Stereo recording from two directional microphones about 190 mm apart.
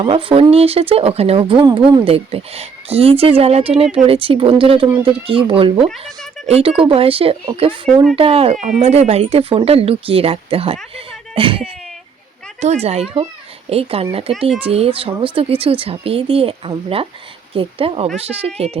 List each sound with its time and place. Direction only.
0.0 s speech: 25° right (ahead or behind)